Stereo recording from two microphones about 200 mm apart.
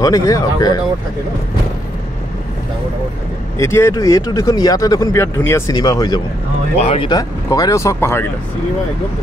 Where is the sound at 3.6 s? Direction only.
15° left (ahead or behind).